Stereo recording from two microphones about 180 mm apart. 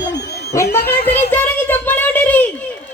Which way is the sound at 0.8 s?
55° left (ahead or behind).